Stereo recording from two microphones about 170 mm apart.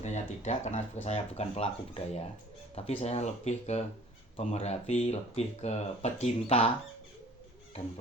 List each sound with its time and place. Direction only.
0.0 s speech: 40° left (ahead or behind)